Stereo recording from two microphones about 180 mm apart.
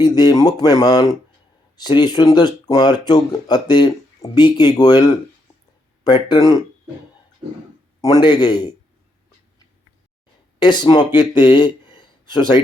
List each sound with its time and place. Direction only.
0.0 s speech: 20° left (ahead or behind)
6.1 s speech: 25° left (ahead or behind)
8.1 s speech: 25° left (ahead or behind)
10.6 s speech: 25° left (ahead or behind)